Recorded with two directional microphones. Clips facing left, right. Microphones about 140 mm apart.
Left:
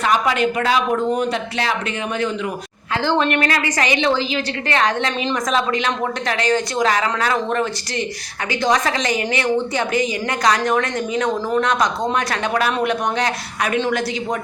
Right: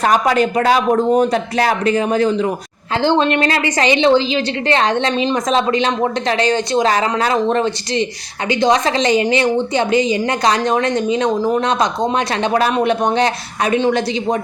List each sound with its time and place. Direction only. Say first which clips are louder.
0.0 s speech: right 4 dB; 40° right (ahead or behind)
3.0 s a woman's voice: right 4 dB; 25° right (ahead or behind)